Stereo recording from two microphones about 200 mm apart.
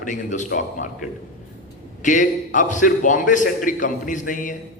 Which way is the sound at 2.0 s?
40° left (ahead or behind).